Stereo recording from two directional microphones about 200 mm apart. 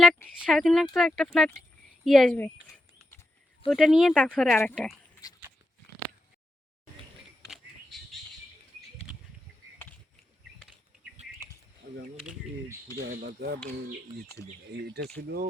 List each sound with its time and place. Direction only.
0.0 s speech: centre (ahead or behind)
7.5 s bird: centre (ahead or behind)
11.9 s a sound: 40° right (ahead or behind)
13.0 s speech: 55° right (ahead or behind)
14.7 s speech: 55° right (ahead or behind)